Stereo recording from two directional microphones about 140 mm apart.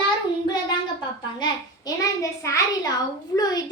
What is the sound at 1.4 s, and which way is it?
A child's voice, 25° left (ahead or behind).